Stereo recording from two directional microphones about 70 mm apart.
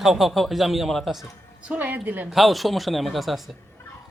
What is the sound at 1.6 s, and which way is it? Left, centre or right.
Speech, right.